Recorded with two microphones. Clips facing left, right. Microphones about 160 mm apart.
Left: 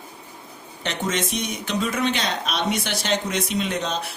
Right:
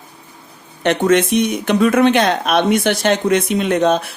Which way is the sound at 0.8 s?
60° right (ahead or behind).